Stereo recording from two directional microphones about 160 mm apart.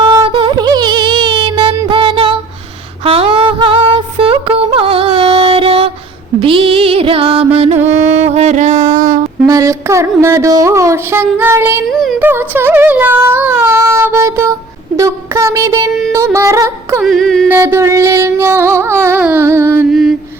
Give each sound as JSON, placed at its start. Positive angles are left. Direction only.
{"t": 0.0, "sound": "music", "side_deg": -30}
{"t": 9.5, "sound": "speech", "side_deg": -20}
{"t": 11.9, "sound": "a sound", "side_deg": 0}
{"t": 12.2, "sound": "child singing", "side_deg": -15}
{"t": 16.1, "sound": "yodeling", "side_deg": -20}
{"t": 17.0, "sound": "yodeling", "side_deg": 0}
{"t": 17.5, "sound": "music", "side_deg": -15}
{"t": 19.9, "sound": "mantra", "side_deg": -5}